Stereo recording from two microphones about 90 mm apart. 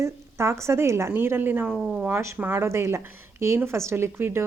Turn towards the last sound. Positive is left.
turn(degrees=-25)  # may be behind; listen again after turning